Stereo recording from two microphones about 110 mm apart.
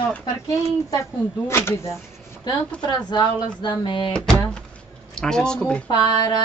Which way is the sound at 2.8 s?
40° left (ahead or behind).